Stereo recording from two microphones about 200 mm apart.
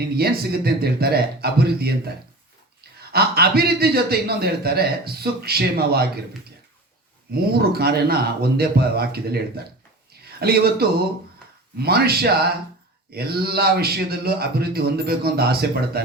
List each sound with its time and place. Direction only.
0.2 s a man's voice: 50° right (ahead or behind)
7.3 s a man's voice: 50° right (ahead or behind)
10.4 s a man's voice: 50° right (ahead or behind)